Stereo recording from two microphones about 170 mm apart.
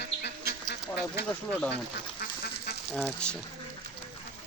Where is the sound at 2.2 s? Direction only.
65° left (ahead or behind).